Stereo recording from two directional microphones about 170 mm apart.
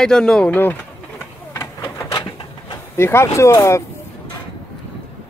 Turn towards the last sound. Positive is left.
turn(degrees=15)  # may be behind; listen again after turning